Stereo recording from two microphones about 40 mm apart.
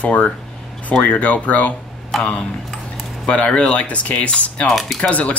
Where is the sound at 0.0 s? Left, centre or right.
Left.